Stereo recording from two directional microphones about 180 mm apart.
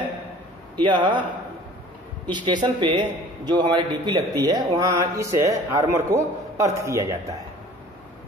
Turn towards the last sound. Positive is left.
turn(degrees=-15)  # may be behind; listen again after turning